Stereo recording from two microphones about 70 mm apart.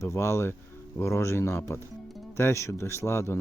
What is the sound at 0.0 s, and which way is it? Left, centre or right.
Speech, left.